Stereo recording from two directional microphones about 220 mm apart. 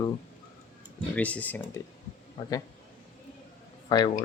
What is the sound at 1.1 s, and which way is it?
Speech, 5° left (ahead or behind).